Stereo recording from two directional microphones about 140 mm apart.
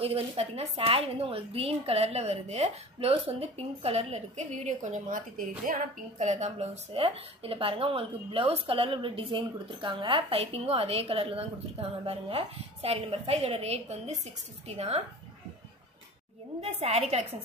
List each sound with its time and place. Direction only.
0.0 s a woman's voice: 45° right (ahead or behind); by 5.2 s 65° right (ahead or behind)
6.1 s a woman's voice: 55° right (ahead or behind)
16.6 s a woman's voice: 50° right (ahead or behind)